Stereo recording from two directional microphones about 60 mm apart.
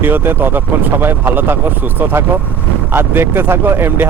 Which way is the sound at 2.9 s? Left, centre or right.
Right.